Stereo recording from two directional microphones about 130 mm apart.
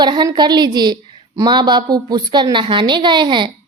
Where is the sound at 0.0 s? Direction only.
35° right (ahead or behind).